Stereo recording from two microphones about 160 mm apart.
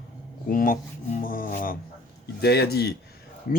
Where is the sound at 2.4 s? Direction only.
85° left.